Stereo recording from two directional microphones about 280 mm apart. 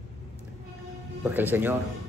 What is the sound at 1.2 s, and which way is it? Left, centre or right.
Speech, centre.